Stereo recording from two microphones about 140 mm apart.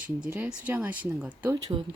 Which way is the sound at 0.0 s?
10° right (ahead or behind).